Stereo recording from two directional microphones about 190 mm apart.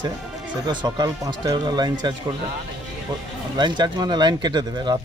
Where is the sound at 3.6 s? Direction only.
25° right (ahead or behind).